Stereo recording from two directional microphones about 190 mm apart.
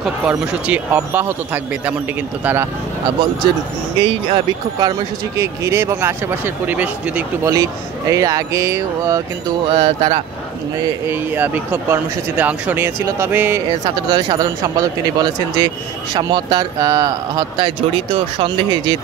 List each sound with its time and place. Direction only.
0.0 s speech: 5° right (ahead or behind)
4.0 s speech: 30° right (ahead or behind)
9.7 s speech: 25° right (ahead or behind)
11.1 s speech: 10° right (ahead or behind)